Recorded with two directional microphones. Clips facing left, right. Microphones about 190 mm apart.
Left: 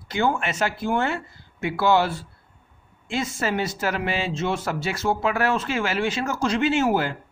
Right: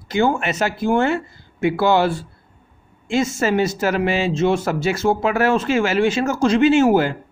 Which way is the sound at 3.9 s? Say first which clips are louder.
Right 7 dB; 85° right.